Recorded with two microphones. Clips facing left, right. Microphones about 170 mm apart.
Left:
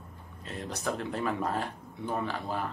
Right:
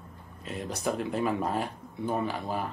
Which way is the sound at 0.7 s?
10° right (ahead or behind).